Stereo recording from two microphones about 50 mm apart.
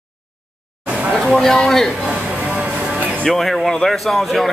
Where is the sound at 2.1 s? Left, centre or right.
Right.